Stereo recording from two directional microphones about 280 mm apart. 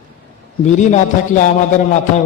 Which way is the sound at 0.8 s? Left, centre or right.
Left.